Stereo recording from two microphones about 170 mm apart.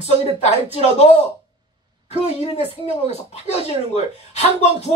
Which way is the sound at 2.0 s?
40° left (ahead or behind).